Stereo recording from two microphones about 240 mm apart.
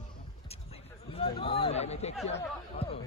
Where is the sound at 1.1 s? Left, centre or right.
Left.